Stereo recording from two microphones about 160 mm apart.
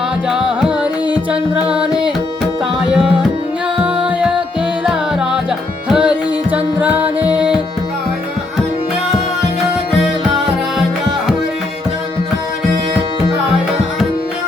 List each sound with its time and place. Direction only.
0.3 s music: 5° right (ahead or behind)
4.9 s music: 5° right (ahead or behind)